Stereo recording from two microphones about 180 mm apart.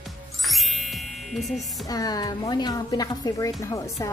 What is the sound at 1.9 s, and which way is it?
Speech, 20° left (ahead or behind).